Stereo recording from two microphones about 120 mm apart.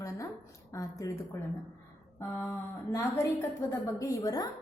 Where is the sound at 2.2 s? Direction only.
15° left (ahead or behind).